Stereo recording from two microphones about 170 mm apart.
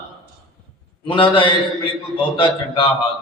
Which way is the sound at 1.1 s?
30° left (ahead or behind).